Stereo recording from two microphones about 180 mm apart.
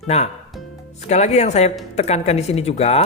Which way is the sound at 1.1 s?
35° left (ahead or behind).